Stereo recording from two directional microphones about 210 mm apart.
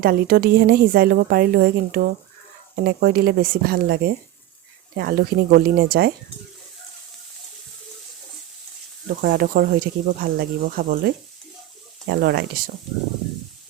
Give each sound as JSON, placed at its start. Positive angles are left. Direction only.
{"t": 0.0, "sound": "a woman's voice", "side_deg": -45}
{"t": 9.2, "sound": "a woman's voice", "side_deg": -45}